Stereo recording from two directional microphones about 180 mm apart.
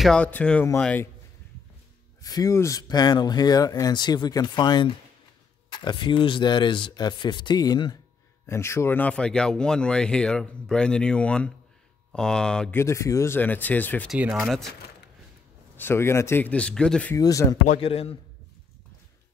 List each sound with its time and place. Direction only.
0.0 s speech: 5° left (ahead or behind)
2.2 s speech: 20° left (ahead or behind); by 12.8 s 5° left (ahead or behind)
12.8 s speech: 15° left (ahead or behind)
14.1 s speech: 5° right (ahead or behind)
15.7 s speech: 10° left (ahead or behind)
17.2 s speech: 20° left (ahead or behind)
17.7 s a man's voice: 30° left (ahead or behind)